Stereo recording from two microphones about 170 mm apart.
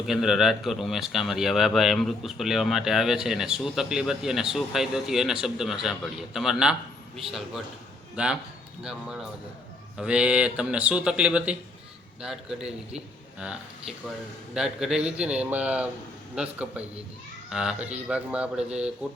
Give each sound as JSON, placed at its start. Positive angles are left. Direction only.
{"t": 0.0, "sound": "speech", "side_deg": 0}